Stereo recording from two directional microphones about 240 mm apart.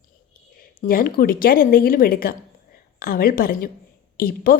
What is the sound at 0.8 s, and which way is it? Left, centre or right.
A woman's voice, left.